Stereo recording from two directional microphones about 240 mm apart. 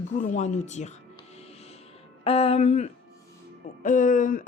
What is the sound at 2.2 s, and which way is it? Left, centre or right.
A woman's voice, left.